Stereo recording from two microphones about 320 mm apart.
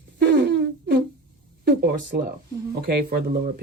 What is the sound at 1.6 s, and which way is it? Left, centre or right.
Speech, right.